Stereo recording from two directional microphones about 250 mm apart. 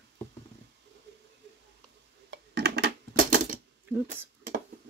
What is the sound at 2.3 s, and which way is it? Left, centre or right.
Coin, right.